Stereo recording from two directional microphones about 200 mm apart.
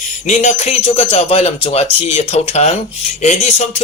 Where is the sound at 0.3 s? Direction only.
35° left (ahead or behind).